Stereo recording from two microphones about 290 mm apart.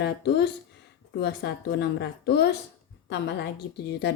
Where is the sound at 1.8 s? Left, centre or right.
Left.